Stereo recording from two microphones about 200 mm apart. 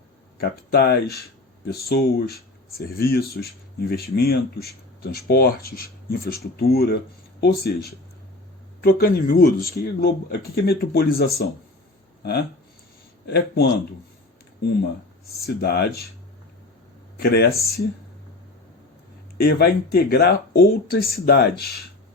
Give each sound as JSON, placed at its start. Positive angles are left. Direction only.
{"t": 0.3, "sound": "speech", "side_deg": 50}
{"t": 15.4, "sound": "speech", "side_deg": 55}
{"t": 17.2, "sound": "speech", "side_deg": 55}
{"t": 19.4, "sound": "speech", "side_deg": 50}